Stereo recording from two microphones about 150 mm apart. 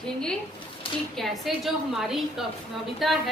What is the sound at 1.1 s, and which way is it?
A woman's voice, centre (ahead or behind).